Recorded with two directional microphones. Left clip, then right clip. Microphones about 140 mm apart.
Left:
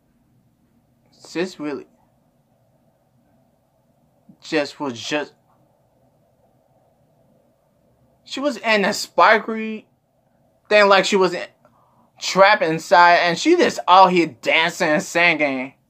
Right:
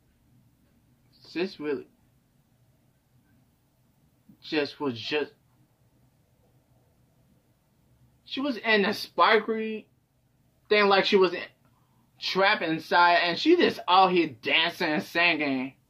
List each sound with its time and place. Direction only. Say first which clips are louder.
1.2 s speech: left 6 dB; 30° left (ahead or behind)
4.4 s speech: left 7 dB; 30° left (ahead or behind)
8.3 s speech: left 6 dB; 35° left (ahead or behind)